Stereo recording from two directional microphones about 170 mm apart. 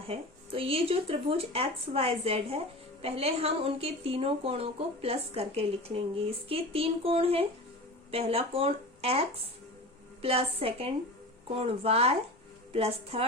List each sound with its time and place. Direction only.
0.1 s a woman's voice: 35° right (ahead or behind)